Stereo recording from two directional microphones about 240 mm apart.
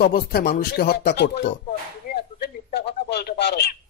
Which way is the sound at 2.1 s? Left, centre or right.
Left.